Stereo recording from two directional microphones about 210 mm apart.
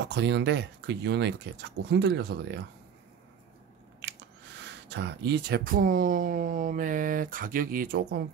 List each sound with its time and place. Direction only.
0.1 s speech: 55° right (ahead or behind)
4.8 s speech: 55° right (ahead or behind)